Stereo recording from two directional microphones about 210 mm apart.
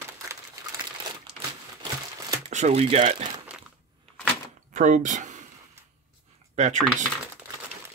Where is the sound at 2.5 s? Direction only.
35° right (ahead or behind).